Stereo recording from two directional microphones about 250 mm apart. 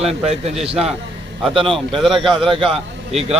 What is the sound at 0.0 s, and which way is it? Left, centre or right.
Speech, right.